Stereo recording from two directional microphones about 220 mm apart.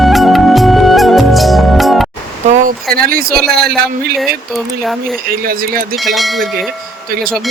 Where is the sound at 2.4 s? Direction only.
35° right (ahead or behind).